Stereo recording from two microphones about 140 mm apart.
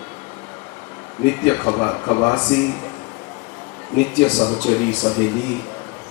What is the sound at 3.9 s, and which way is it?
A man's voice, 10° left (ahead or behind).